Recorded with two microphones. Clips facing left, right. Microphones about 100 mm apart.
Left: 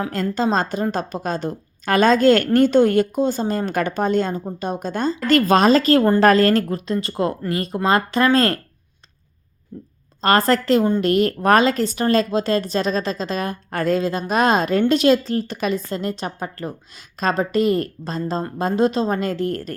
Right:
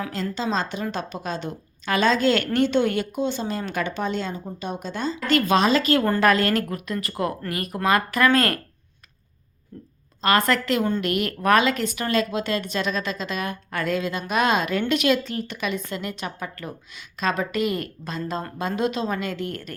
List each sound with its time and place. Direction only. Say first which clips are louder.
0.1 s a woman's voice: left 7 dB; 45° left (ahead or behind); by 8.5 s 30° left (ahead or behind)
10.2 s a woman's voice: left 4 dB; 35° left (ahead or behind)